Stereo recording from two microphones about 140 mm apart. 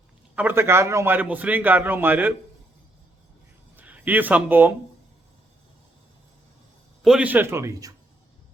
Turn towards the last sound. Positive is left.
turn(degrees=-20)  # may be behind; listen again after turning